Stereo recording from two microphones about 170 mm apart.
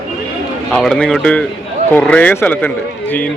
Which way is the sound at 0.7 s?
5° left (ahead or behind).